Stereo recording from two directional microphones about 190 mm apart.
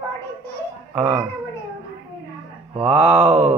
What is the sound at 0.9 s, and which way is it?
Speech, 10° right (ahead or behind).